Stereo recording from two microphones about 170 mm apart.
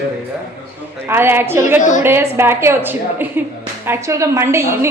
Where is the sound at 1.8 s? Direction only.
50° left (ahead or behind).